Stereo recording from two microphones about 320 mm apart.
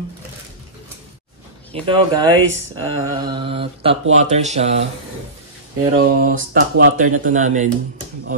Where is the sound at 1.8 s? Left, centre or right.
Centre.